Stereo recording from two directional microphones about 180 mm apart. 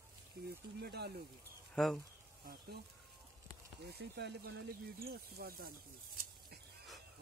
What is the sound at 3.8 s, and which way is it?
Speech, 65° right (ahead or behind).